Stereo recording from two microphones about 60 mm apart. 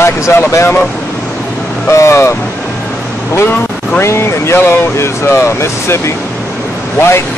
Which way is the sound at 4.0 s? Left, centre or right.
Left.